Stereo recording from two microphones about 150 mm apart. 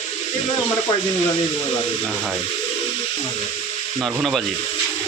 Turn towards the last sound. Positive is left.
turn(degrees=0)  # may be behind; listen again after turning